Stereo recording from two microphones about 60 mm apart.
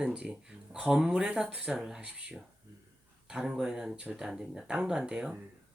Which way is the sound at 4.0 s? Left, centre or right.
Right.